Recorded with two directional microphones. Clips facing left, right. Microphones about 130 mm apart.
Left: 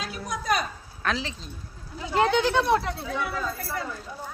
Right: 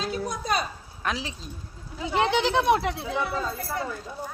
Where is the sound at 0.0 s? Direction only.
25° right (ahead or behind).